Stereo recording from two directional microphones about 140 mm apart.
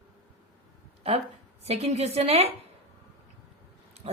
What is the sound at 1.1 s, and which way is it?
A woman's voice, 45° right (ahead or behind).